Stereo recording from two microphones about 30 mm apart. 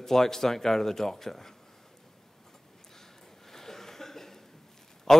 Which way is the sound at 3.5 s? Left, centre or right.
Centre.